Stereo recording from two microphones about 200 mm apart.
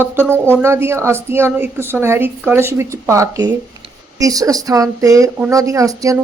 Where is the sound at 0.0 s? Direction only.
10° right (ahead or behind).